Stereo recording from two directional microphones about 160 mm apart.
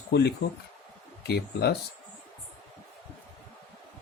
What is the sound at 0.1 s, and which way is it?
Speech, 90° left.